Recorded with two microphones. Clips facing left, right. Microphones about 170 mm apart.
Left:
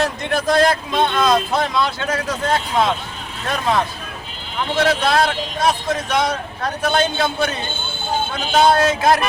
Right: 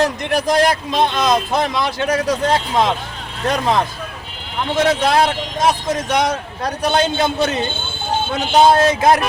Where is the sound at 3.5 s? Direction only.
20° right (ahead or behind).